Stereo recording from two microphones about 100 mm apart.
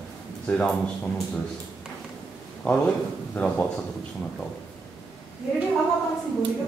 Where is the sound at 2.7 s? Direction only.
10° left (ahead or behind).